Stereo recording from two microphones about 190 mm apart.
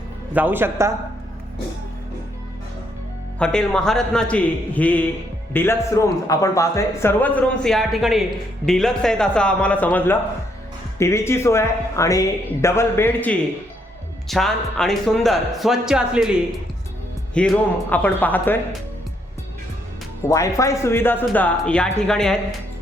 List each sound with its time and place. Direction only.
0.3 s a man's voice: 10° right (ahead or behind)
3.3 s speech: 5° left (ahead or behind)
20.2 s speech: 15° left (ahead or behind)